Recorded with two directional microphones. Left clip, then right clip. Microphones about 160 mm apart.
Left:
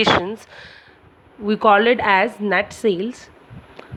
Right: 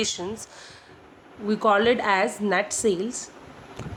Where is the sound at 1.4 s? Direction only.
45° left (ahead or behind).